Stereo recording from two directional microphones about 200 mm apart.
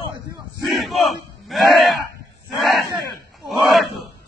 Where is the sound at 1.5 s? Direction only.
Centre (ahead or behind).